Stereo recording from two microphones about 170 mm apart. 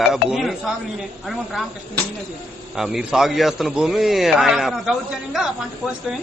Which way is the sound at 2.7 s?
5° right (ahead or behind).